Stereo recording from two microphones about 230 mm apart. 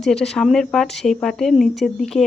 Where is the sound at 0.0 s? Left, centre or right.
Centre.